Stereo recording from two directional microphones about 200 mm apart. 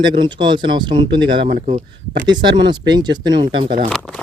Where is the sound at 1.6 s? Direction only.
35° right (ahead or behind).